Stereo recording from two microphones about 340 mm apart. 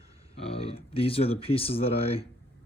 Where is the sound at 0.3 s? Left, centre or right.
Centre.